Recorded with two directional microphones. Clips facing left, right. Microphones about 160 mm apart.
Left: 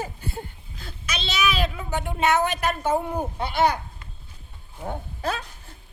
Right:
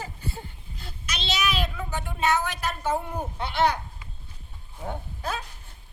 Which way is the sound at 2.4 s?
60° left (ahead or behind).